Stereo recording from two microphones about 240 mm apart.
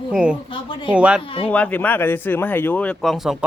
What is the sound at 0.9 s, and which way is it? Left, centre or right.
Speech, centre.